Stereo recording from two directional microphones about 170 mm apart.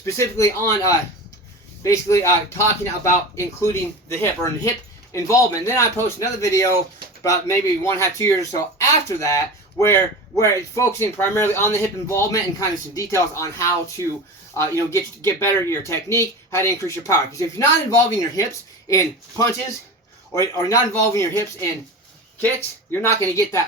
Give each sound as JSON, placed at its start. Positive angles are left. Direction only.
{"t": 0.0, "sound": "speech", "side_deg": 15}